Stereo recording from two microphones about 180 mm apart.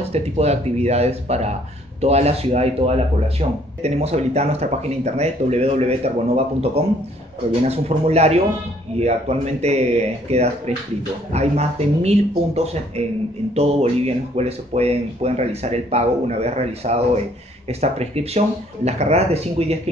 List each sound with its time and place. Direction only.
0.1 s speech: 35° right (ahead or behind)